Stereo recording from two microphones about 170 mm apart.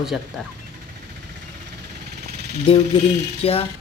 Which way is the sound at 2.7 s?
30° left (ahead or behind).